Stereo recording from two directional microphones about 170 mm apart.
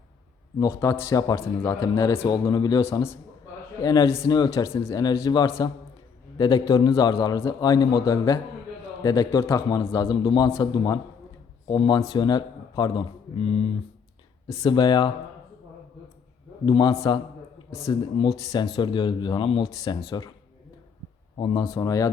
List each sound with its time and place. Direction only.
0.6 s a man's voice: 15° left (ahead or behind)
13.3 s speech: 35° left (ahead or behind)
14.5 s a man's voice: 20° left (ahead or behind)
16.6 s a man's voice: 25° left (ahead or behind)
21.3 s a man's voice: 25° left (ahead or behind)